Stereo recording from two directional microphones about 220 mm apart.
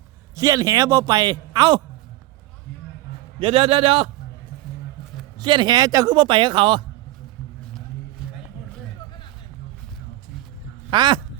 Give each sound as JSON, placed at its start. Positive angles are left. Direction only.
{"t": 0.3, "sound": "a man's voice", "side_deg": -15}
{"t": 3.4, "sound": "a man's voice", "side_deg": -25}
{"t": 5.4, "sound": "a man's voice", "side_deg": -20}
{"t": 10.9, "sound": "a man's voice", "side_deg": -20}